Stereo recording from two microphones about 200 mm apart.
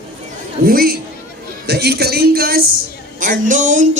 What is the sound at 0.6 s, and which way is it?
A man's voice, 45° right (ahead or behind).